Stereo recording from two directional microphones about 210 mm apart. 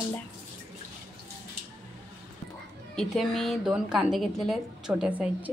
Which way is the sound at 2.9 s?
Centre (ahead or behind).